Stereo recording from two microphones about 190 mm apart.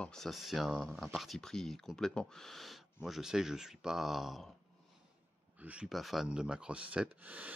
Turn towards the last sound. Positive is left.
turn(degrees=-5)  # may be behind; listen again after turning